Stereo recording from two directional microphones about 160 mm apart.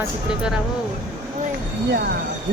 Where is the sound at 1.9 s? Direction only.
80° right.